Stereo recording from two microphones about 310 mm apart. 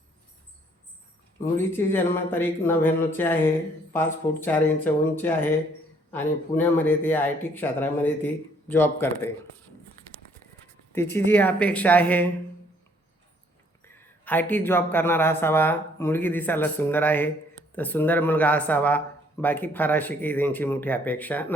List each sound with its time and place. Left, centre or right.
1.5 s speech: centre
10.9 s a man's voice: centre
13.8 s a man's voice: centre